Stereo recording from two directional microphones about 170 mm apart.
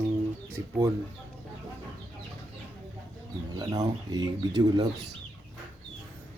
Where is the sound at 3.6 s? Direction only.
20° right (ahead or behind).